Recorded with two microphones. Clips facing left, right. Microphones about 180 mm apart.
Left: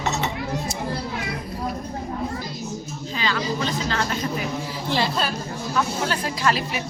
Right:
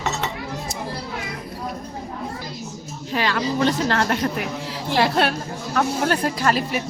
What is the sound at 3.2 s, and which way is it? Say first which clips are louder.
A woman's voice: right 4 dB; 60° right (ahead or behind).